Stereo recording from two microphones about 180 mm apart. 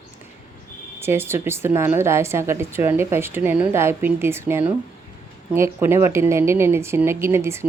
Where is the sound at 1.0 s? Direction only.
15° right (ahead or behind).